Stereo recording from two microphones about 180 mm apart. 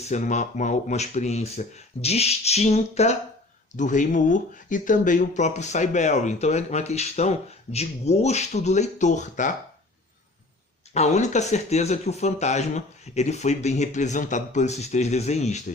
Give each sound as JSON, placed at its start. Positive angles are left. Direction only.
{"t": 0.0, "sound": "speech", "side_deg": 40}
{"t": 10.9, "sound": "speech", "side_deg": 40}